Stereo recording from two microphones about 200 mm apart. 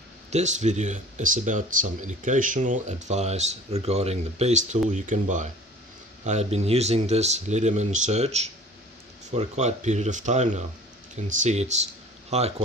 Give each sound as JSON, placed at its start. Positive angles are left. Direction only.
{"t": 0.3, "sound": "speech", "side_deg": -35}